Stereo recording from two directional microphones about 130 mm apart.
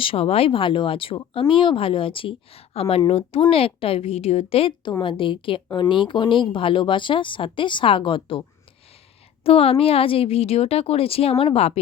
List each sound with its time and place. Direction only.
0.0 s speech: 45° left (ahead or behind)